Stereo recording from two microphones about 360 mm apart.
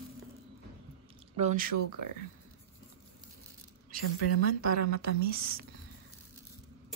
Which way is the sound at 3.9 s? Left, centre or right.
Right.